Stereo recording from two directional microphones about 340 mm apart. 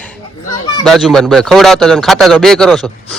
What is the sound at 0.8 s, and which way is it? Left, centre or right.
Speech, centre.